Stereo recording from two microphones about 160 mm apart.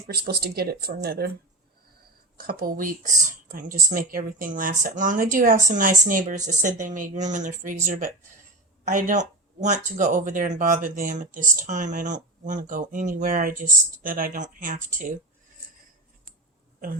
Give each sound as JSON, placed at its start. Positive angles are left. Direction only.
{"t": 0.1, "sound": "speech", "side_deg": -75}
{"t": 2.4, "sound": "speech", "side_deg": -70}